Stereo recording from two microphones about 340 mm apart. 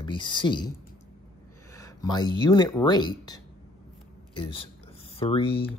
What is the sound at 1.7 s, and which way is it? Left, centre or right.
Speech, centre.